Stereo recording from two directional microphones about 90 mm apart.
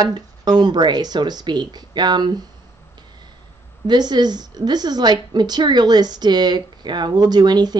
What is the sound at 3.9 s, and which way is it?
A woman's voice, 50° right (ahead or behind).